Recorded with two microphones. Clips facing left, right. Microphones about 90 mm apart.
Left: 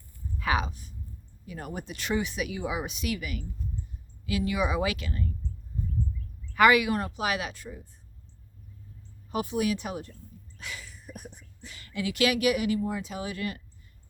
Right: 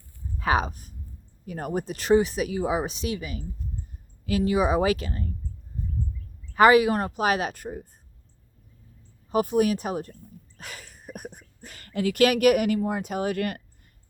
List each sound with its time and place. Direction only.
0.3 s a woman's voice: 35° right (ahead or behind)
6.5 s a woman's voice: 35° right (ahead or behind); by 7.9 s 50° right (ahead or behind)
9.3 s speech: 45° right (ahead or behind)